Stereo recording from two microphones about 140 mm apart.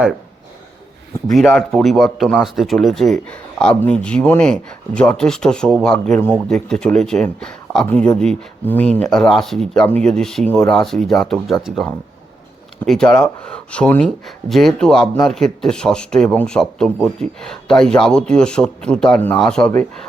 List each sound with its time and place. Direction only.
1.3 s speech: centre (ahead or behind)